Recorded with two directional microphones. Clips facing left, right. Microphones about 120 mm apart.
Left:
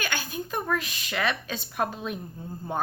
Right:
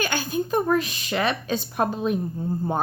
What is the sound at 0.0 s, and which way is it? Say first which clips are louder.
A woman's voice: right 7 dB; 35° right (ahead or behind).